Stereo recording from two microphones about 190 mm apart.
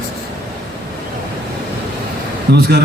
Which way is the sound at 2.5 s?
55° right (ahead or behind).